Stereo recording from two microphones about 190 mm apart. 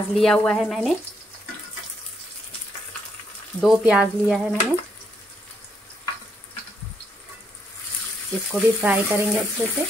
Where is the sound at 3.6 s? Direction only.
5° right (ahead or behind).